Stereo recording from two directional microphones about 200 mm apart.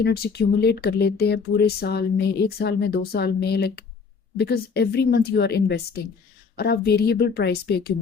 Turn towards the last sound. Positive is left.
turn(degrees=55)  # may be behind; listen again after turning